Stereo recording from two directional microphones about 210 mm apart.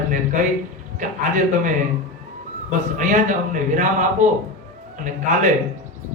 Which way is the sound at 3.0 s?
35° right (ahead or behind).